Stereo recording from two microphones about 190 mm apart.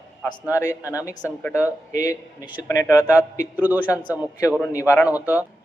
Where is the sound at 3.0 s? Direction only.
10° right (ahead or behind).